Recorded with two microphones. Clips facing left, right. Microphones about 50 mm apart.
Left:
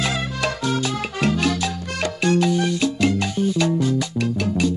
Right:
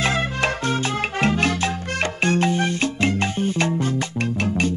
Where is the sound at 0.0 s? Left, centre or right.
Right.